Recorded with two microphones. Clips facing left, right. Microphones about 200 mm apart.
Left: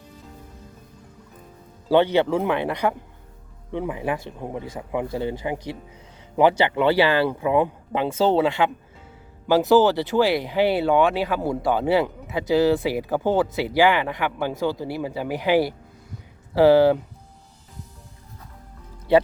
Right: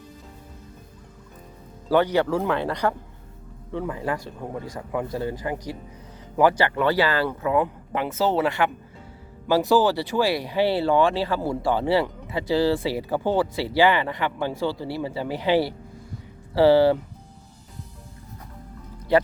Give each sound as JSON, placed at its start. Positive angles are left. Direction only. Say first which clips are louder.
{"t": 1.9, "sound": "speech", "louder": "left 2 dB", "side_deg": 25}